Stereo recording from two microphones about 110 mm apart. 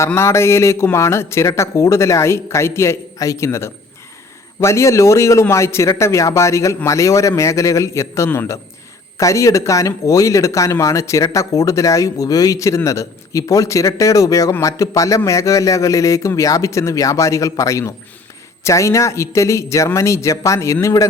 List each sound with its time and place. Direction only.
0.0 s speech: 25° left (ahead or behind)